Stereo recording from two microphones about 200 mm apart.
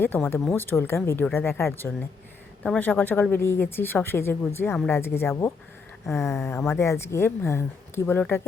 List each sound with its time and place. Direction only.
0.0 s a woman's voice: 10° left (ahead or behind)